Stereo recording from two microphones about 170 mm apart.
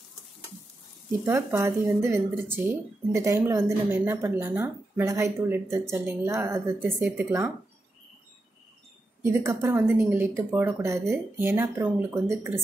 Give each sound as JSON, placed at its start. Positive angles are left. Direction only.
{"t": 1.2, "sound": "a woman's voice", "side_deg": -15}
{"t": 9.2, "sound": "a woman's voice", "side_deg": -15}